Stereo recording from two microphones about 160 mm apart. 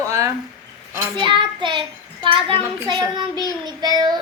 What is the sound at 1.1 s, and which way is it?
A woman's voice, 30° right (ahead or behind).